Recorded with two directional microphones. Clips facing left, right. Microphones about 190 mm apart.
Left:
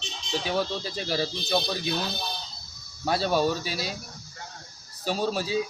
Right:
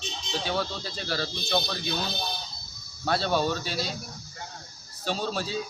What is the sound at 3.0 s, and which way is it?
Speech, 10° left (ahead or behind).